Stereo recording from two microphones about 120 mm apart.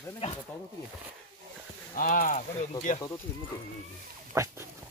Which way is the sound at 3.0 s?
25° left (ahead or behind).